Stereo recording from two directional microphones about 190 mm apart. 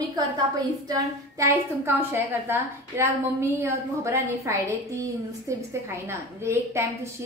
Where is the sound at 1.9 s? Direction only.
10° right (ahead or behind).